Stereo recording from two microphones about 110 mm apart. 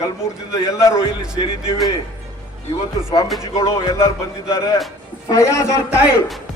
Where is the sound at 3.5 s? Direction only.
30° left (ahead or behind).